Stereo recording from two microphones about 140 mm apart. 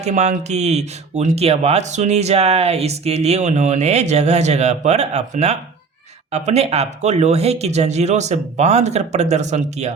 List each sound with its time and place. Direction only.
0.0 s speech: 55° right (ahead or behind)